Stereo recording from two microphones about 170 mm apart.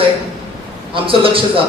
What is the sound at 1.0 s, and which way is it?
Speech, 30° right (ahead or behind).